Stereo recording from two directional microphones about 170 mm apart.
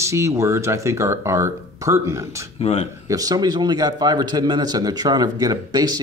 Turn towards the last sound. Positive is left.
turn(degrees=-25)  # may be behind; listen again after turning